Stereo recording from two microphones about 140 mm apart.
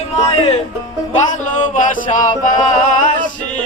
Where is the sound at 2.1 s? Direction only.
65° left (ahead or behind).